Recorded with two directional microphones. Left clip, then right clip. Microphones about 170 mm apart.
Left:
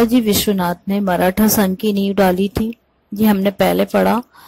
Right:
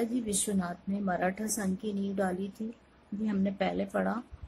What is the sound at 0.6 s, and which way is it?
A woman's voice, 45° left (ahead or behind).